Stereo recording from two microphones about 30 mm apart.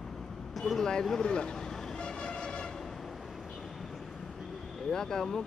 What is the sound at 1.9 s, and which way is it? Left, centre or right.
Music, left.